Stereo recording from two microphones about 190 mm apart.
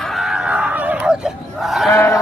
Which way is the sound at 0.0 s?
Centre (ahead or behind).